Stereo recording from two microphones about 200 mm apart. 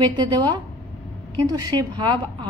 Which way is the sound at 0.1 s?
20° right (ahead or behind).